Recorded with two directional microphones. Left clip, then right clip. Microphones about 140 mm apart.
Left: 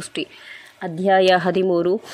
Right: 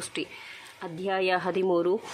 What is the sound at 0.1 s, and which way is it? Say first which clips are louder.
Speech: left 7 dB; 25° left (ahead or behind).